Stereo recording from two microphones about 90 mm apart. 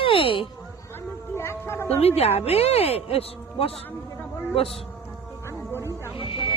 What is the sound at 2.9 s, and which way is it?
Speech, 90° left.